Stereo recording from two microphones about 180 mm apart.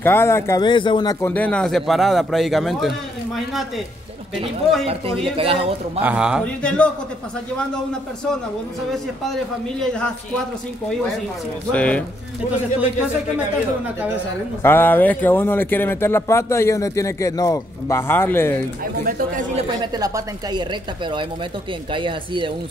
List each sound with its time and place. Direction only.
0.0 s speech: 15° left (ahead or behind)
1.2 s a man's voice: 10° left (ahead or behind)
5.3 s a man's voice: 30° right (ahead or behind)
5.9 s a man's voice: 5° right (ahead or behind)
6.4 s speech: 5° left (ahead or behind)
8.9 s a man's voice: centre (ahead or behind)
11.7 s speech: 5° left (ahead or behind)
14.6 s speech: 10° left (ahead or behind)
19.0 s speech: 55° right (ahead or behind)
19.5 s a woman's voice: 25° right (ahead or behind)